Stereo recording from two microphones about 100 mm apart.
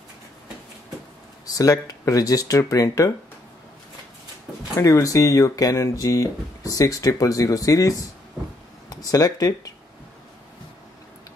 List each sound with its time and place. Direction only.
1.4 s speech: 35° left (ahead or behind)
4.7 s speech: 30° left (ahead or behind)
8.8 s a sound: 35° left (ahead or behind)